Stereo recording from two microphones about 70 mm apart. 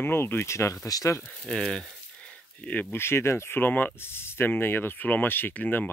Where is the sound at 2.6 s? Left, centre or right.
Centre.